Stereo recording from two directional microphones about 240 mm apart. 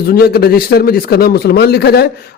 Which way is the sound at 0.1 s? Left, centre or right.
Left.